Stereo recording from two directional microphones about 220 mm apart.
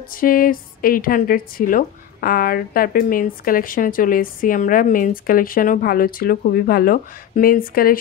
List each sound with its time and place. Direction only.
0.1 s a woman's voice: 40° left (ahead or behind)